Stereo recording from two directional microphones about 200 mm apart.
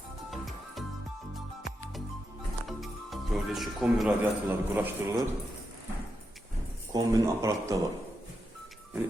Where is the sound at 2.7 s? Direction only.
Centre (ahead or behind).